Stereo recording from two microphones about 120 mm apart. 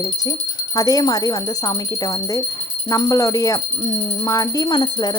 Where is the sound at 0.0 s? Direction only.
30° left (ahead or behind).